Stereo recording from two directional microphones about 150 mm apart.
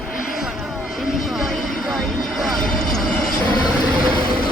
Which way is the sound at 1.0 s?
Centre (ahead or behind).